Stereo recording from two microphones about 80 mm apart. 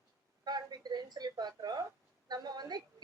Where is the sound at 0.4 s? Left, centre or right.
Right.